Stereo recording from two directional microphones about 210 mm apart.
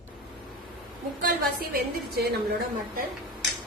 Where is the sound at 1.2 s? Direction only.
45° right (ahead or behind).